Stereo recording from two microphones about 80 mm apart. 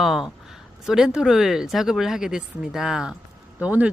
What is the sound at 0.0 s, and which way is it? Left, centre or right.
A man's voice, centre.